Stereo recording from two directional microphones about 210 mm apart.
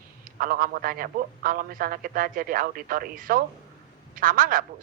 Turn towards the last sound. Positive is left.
turn(degrees=-40)  # may be behind; listen again after turning